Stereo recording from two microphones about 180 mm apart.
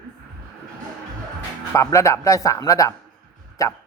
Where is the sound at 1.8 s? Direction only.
15° left (ahead or behind).